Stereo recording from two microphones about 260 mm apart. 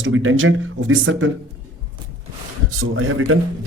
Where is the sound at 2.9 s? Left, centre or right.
Right.